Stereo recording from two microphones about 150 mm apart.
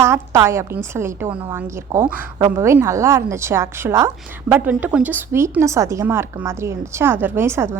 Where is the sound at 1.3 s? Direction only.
35° right (ahead or behind).